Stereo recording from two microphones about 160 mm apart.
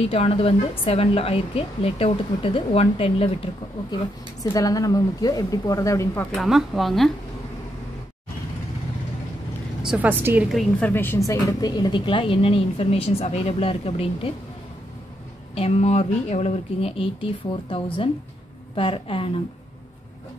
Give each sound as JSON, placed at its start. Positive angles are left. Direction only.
{"t": 0.0, "sound": "speech", "side_deg": 40}
{"t": 3.9, "sound": "speech", "side_deg": 25}
{"t": 6.3, "sound": "a woman's voice", "side_deg": 0}
{"t": 9.8, "sound": "a woman's voice", "side_deg": -10}
{"t": 10.5, "sound": "speech", "side_deg": 10}
{"t": 15.5, "sound": "speech", "side_deg": 40}